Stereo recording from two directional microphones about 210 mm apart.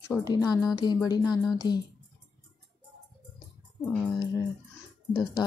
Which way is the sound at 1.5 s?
20° left (ahead or behind).